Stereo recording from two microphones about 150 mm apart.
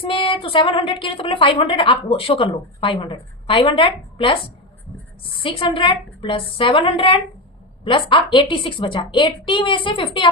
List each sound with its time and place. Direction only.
0.0 s a woman's voice: 35° left (ahead or behind)